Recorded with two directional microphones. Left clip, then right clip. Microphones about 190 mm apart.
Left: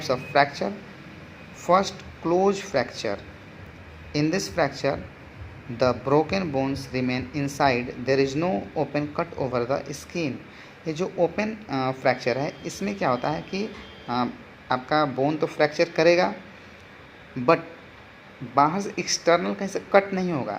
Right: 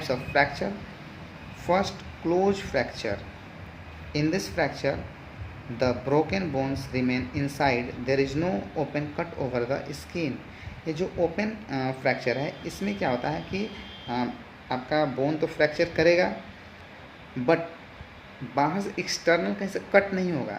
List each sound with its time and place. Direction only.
0.0 s speech: 20° left (ahead or behind)
14.7 s speech: 25° left (ahead or behind)
18.5 s speech: 20° left (ahead or behind)